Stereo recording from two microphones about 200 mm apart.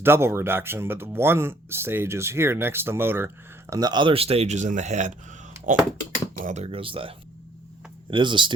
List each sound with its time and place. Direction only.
0.0 s speech: 10° right (ahead or behind)
8.1 s speech: 25° right (ahead or behind)